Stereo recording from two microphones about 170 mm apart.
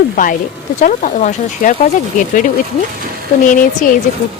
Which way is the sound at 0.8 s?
50° left (ahead or behind).